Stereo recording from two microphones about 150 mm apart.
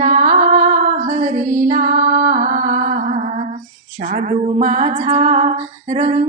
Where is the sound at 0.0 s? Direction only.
55° right (ahead or behind).